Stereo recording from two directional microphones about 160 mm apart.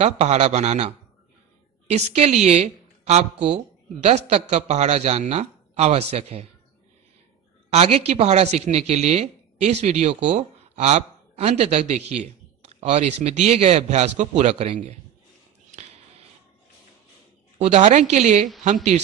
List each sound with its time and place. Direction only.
0.0 s a woman's voice: 45° right (ahead or behind)
7.7 s a woman's voice: 40° right (ahead or behind)
17.6 s a woman's voice: 45° right (ahead or behind)